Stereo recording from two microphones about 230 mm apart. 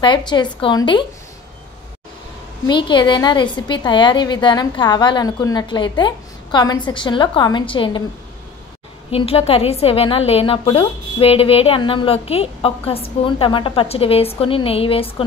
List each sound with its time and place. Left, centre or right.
0.0 s a woman's voice: centre
2.6 s a woman's voice: centre
9.1 s a woman's voice: left